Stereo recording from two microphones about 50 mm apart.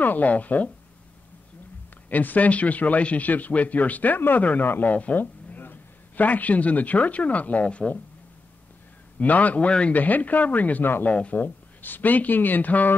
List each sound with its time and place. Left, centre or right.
0.0 s speech: left
2.0 s a man's voice: left
9.2 s a man's voice: left
9.9 s a man's voice: left
11.3 s speech: left